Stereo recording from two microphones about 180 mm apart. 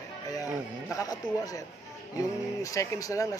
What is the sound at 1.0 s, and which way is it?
Speech, 20° left (ahead or behind).